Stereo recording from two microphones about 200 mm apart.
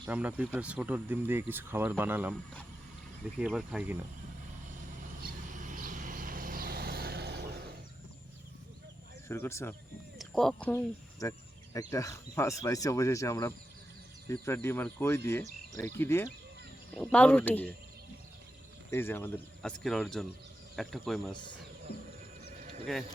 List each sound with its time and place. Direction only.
0.1 s speech: 5° right (ahead or behind)
3.4 s speech: 5° right (ahead or behind)
5.2 s vehicle: 40° right (ahead or behind)
9.3 s speech: 15° left (ahead or behind)
10.2 s speech: centre (ahead or behind)
18.9 s speech: 10° left (ahead or behind)